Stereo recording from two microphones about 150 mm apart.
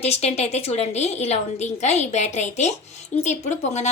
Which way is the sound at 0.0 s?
45° left (ahead or behind).